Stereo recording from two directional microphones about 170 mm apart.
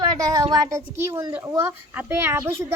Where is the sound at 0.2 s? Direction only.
20° right (ahead or behind).